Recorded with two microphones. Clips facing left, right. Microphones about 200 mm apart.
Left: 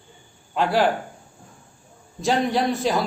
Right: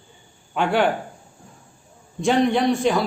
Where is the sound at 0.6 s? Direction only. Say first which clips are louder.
Even; 35° left (ahead or behind).